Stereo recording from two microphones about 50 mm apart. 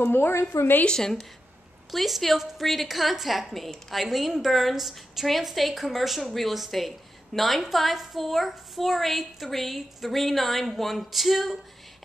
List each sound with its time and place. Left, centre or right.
0.0 s speech: left
0.8 s a woman's voice: centre
1.9 s a woman's voice: centre